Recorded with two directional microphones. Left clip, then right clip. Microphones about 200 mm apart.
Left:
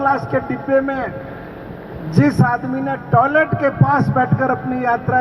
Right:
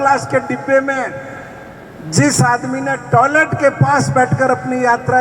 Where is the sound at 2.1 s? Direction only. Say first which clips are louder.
Right 3 dB; 25° right (ahead or behind).